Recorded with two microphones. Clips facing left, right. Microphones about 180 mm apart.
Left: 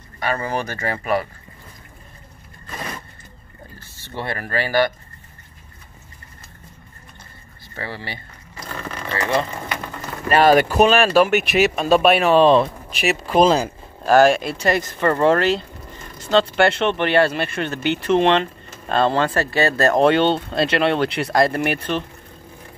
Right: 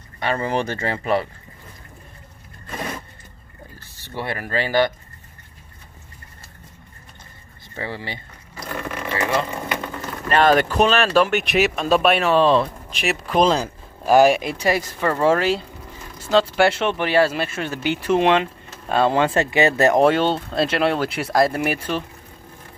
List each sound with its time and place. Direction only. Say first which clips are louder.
0.2 s speech: right 1 dB; 25° right (ahead or behind)
3.9 s speech: even; 15° right (ahead or behind)
7.7 s speech: right 1 dB; 20° right (ahead or behind)
10.2 s speech: left 2 dB; 10° left (ahead or behind)
12.2 s speech: left 3 dB; 15° left (ahead or behind)
12.9 s speech: left 3 dB; 5° left (ahead or behind)
14.0 s speech: even; 10° right (ahead or behind)
20.1 s speech: left 2 dB; centre (ahead or behind)